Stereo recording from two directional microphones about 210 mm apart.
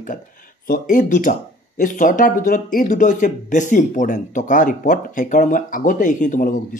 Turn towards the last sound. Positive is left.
turn(degrees=40)  # may be behind; listen again after turning